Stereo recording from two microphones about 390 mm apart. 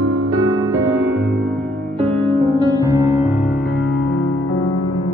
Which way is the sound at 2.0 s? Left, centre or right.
Centre.